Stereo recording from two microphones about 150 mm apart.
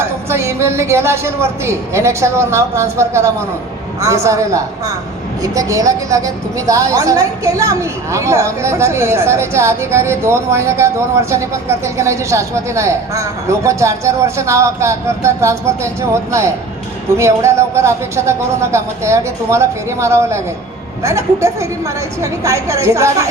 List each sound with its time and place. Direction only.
0.3 s a woman's voice: 15° right (ahead or behind)